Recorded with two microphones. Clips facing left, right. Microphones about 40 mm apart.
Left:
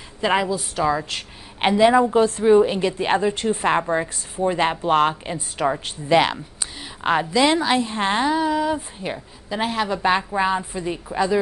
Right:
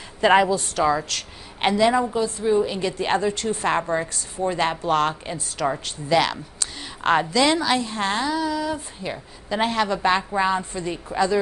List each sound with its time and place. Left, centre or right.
0.2 s a woman's voice: centre
0.6 s a woman's voice: centre
1.0 s a woman's voice: centre
2.1 s a woman's voice: left
2.4 s a woman's voice: left
6.8 s a sound: centre
7.4 s a woman's voice: left
9.5 s a woman's voice: centre